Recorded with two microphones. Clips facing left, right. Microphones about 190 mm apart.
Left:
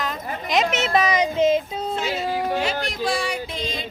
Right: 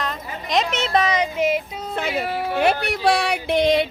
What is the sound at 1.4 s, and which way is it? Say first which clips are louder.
Child singing: left 3 dB; 25° left (ahead or behind).